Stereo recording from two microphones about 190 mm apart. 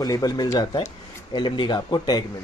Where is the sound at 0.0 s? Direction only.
20° left (ahead or behind).